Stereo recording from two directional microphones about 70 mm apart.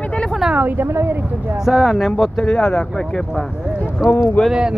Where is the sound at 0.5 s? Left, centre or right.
Right.